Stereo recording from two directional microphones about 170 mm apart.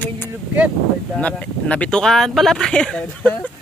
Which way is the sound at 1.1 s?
5° left (ahead or behind).